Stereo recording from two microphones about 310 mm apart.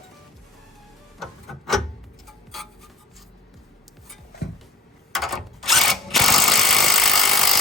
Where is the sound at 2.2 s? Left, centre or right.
Centre.